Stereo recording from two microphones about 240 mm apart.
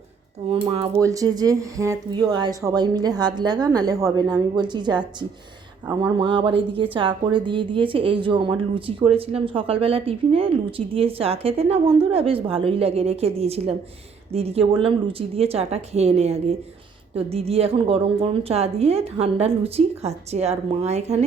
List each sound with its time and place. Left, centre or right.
0.5 s a woman's voice: right
0.9 s a woman's voice: centre
6.1 s a woman's voice: centre